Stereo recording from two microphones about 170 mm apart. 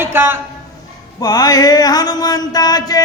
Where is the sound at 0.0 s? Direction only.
15° right (ahead or behind).